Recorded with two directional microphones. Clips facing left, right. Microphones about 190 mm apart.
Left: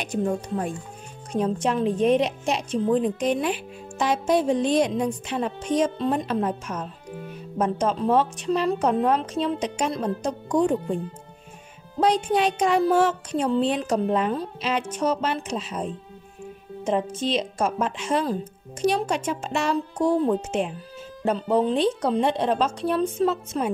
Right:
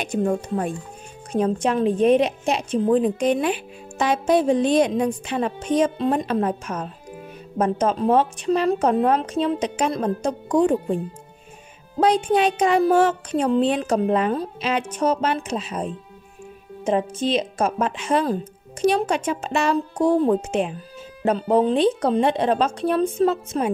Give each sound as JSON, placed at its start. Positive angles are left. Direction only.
{"t": 1.4, "sound": "speech", "side_deg": -60}
{"t": 12.0, "sound": "speech", "side_deg": -60}
{"t": 16.8, "sound": "speech", "side_deg": -55}